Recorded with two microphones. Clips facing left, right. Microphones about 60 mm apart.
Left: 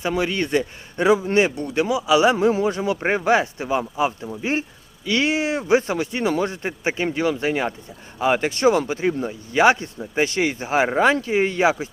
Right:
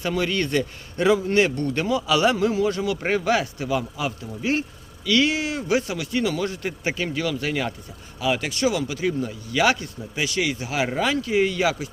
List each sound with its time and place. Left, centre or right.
0.0 s a man's voice: centre